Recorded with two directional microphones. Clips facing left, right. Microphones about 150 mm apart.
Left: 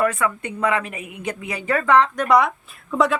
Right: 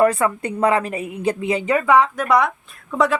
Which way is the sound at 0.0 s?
35° right (ahead or behind).